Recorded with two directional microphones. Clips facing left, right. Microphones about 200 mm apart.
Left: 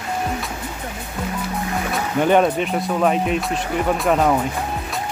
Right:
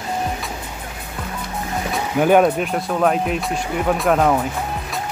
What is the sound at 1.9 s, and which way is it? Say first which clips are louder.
Speech: right 2 dB; 5° right (ahead or behind).